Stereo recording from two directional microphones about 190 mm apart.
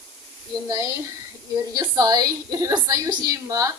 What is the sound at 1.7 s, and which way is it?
A woman's voice, 20° right (ahead or behind).